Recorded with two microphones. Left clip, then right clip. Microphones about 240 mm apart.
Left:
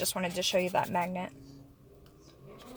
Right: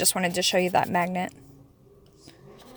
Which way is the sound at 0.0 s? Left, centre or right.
Right.